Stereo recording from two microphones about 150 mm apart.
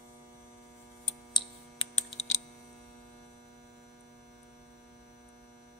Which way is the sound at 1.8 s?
50° left (ahead or behind).